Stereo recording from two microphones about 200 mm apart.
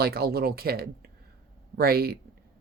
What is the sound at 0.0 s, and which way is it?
Speech, 50° right (ahead or behind).